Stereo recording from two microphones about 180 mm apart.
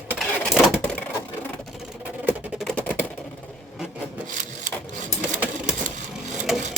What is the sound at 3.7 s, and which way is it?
Wood, 5° right (ahead or behind).